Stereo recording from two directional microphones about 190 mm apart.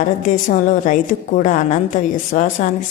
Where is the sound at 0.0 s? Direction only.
45° left (ahead or behind).